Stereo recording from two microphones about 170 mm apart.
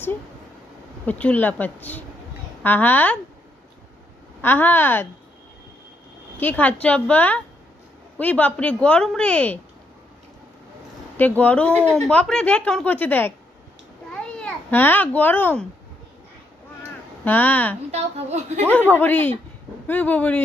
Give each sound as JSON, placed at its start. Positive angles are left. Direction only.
{"t": 1.0, "sound": "speech", "side_deg": 10}
{"t": 4.4, "sound": "speech", "side_deg": 10}
{"t": 6.4, "sound": "speech", "side_deg": 10}
{"t": 11.2, "sound": "a child's voice", "side_deg": 10}
{"t": 17.2, "sound": "speech", "side_deg": 10}
{"t": 17.9, "sound": "a woman's voice", "side_deg": -40}
{"t": 18.6, "sound": "speech", "side_deg": 10}